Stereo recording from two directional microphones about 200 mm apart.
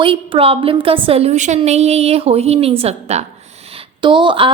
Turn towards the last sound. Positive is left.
turn(degrees=-25)  # may be behind; listen again after turning